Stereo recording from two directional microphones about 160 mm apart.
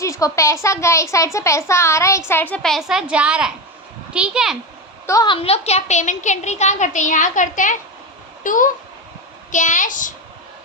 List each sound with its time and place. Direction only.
0.0 s a child's voice: 20° left (ahead or behind); by 4.5 s 5° right (ahead or behind)
5.0 s a woman's voice: 25° left (ahead or behind); by 10.1 s 55° left (ahead or behind)